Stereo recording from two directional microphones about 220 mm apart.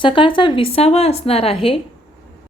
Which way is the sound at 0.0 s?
20° left (ahead or behind).